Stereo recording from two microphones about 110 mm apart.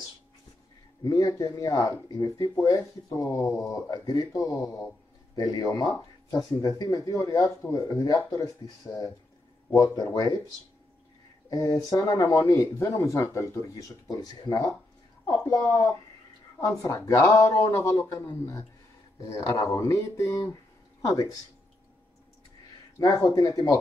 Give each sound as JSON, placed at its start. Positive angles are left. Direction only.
{"t": 1.0, "sound": "speech", "side_deg": 30}
{"t": 9.7, "sound": "speech", "side_deg": 30}
{"t": 11.5, "sound": "speech", "side_deg": 30}
{"t": 22.9, "sound": "speech", "side_deg": 30}